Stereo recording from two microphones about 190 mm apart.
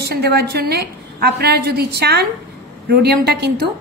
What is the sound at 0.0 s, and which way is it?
A woman's voice, 60° right (ahead or behind).